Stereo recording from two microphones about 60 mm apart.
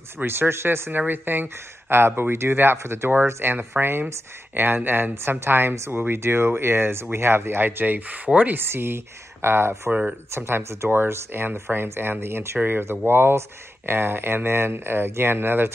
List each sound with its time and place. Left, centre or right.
0.2 s speech: right
3.8 s speech: centre
4.6 s speech: right
8.6 s speech: right